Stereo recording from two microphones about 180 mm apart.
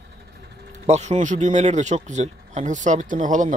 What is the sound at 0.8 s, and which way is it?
A man's voice, 40° right (ahead or behind).